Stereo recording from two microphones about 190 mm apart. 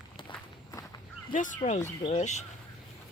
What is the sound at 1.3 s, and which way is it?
Speech, 40° left (ahead or behind).